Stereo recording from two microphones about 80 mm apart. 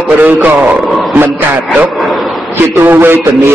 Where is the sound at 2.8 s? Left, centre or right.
Right.